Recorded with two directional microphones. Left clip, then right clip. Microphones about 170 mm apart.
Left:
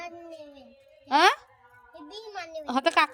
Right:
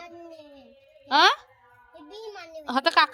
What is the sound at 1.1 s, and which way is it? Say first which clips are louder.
Speech: right 2 dB; 10° left (ahead or behind).